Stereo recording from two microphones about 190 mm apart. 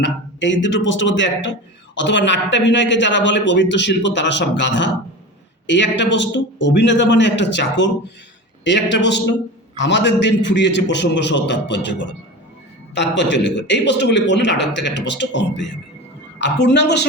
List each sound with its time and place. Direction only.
0.0 s a man's voice: 70° left (ahead or behind)